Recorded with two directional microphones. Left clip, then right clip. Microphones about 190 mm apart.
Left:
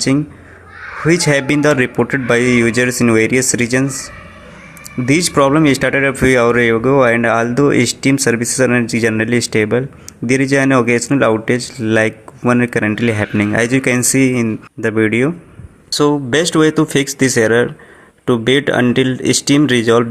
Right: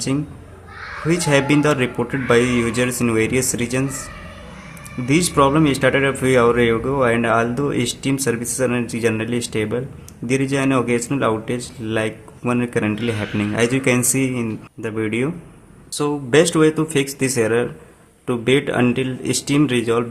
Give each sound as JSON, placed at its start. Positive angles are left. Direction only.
{"t": 1.0, "sound": "speech", "side_deg": 30}
{"t": 5.0, "sound": "speech", "side_deg": 30}